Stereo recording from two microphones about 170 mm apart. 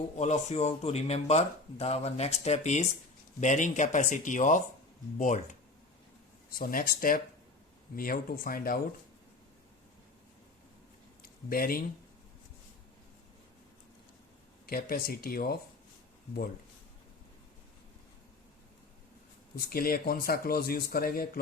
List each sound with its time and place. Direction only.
0.2 s speech: 45° left (ahead or behind)
6.6 s a man's voice: 60° left (ahead or behind)
11.2 s a sound: 60° left (ahead or behind)
14.7 s a man's voice: 60° left (ahead or behind)
19.5 s a man's voice: 60° left (ahead or behind)